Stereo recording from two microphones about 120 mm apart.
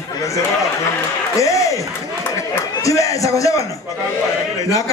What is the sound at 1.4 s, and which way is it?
A man's voice, 25° left (ahead or behind).